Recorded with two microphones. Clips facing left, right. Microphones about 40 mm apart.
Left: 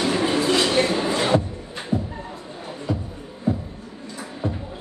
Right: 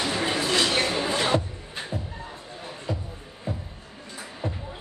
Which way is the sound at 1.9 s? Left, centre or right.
Left.